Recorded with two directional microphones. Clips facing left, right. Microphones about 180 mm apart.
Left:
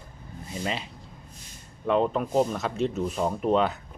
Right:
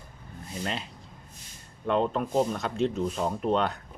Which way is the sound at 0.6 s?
Centre (ahead or behind).